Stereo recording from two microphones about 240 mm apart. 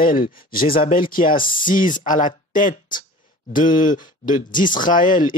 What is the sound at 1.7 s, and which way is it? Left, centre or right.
Speech, left.